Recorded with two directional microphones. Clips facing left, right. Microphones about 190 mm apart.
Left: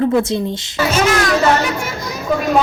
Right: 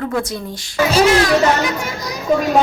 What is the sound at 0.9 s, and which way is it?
Speech, 30° right (ahead or behind).